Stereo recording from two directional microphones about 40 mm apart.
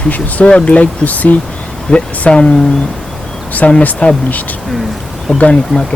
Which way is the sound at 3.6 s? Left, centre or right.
Left.